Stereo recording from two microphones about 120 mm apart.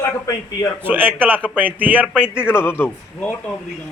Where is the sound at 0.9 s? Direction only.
15° right (ahead or behind).